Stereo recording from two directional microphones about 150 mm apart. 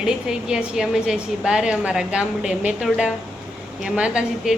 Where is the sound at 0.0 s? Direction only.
5° right (ahead or behind).